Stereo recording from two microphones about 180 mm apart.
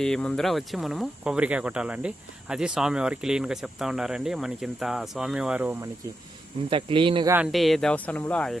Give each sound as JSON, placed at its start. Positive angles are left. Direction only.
{"t": 0.0, "sound": "speech", "side_deg": 5}
{"t": 6.7, "sound": "speech", "side_deg": -30}
{"t": 7.3, "sound": "speech", "side_deg": -10}
{"t": 7.5, "sound": "speech", "side_deg": 0}